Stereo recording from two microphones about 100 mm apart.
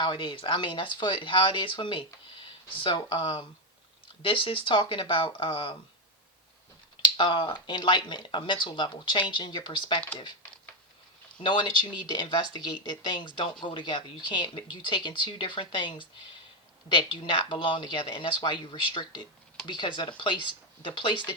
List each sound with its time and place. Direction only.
0.0 s speech: 50° left (ahead or behind)
7.0 s speech: 50° left (ahead or behind)
11.3 s speech: 50° left (ahead or behind)